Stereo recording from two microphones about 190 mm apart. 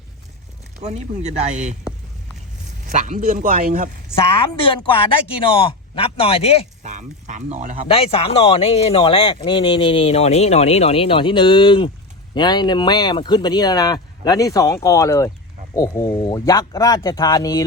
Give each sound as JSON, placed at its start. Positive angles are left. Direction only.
{"t": 0.9, "sound": "speech", "side_deg": -35}
{"t": 2.8, "sound": "a man's voice", "side_deg": -40}
{"t": 4.1, "sound": "a woman's voice", "side_deg": 15}
{"t": 4.6, "sound": "speech", "side_deg": 30}
{"t": 6.8, "sound": "speech", "side_deg": -40}
{"t": 7.9, "sound": "speech", "side_deg": 30}